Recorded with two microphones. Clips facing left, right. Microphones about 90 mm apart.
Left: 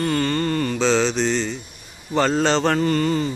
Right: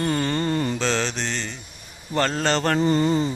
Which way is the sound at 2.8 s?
20° right (ahead or behind).